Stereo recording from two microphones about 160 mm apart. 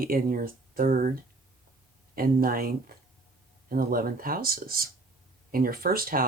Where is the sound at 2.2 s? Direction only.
65° right (ahead or behind).